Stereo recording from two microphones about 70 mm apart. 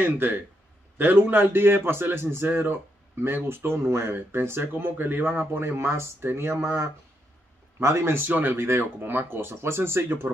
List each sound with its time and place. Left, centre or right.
0.0 s a man's voice: right